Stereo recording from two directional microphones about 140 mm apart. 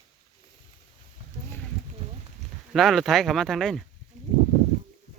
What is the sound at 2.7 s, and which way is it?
Speech, centre (ahead or behind).